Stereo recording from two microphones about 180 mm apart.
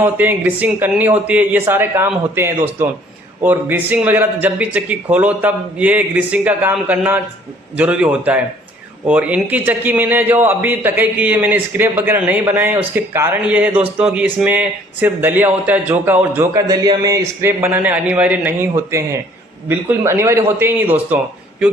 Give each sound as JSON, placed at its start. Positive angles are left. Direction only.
{"t": 0.0, "sound": "a man's voice", "side_deg": -10}